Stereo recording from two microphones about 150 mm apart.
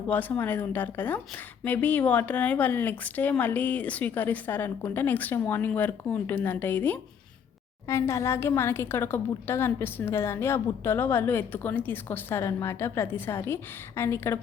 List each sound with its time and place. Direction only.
0.1 s a woman's voice: 10° left (ahead or behind)